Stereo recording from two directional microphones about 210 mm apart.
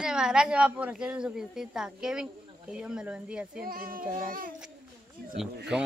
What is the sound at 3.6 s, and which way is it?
Child singing, 45° right (ahead or behind).